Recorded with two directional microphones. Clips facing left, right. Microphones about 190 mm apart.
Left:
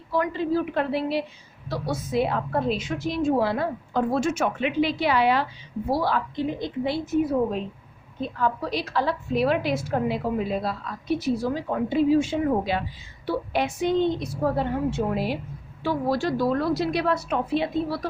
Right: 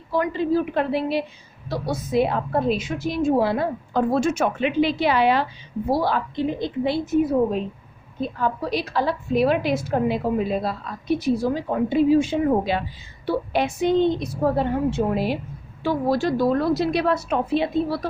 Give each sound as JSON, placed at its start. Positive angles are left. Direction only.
{"t": 0.1, "sound": "a woman's voice", "side_deg": -20}
{"t": 3.9, "sound": "a woman's voice", "side_deg": -35}
{"t": 8.2, "sound": "a woman's voice", "side_deg": -15}